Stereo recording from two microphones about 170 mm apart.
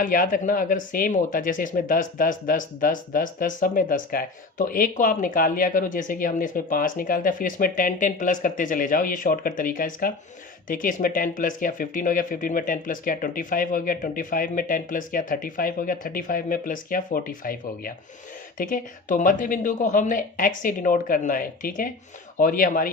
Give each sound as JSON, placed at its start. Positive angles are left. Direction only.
{"t": 0.0, "sound": "speech", "side_deg": 55}